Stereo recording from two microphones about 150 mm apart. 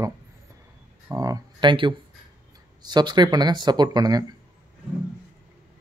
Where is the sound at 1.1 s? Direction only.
25° right (ahead or behind).